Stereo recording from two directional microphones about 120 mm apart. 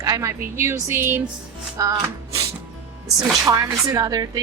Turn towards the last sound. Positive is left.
turn(degrees=-30)  # may be behind; listen again after turning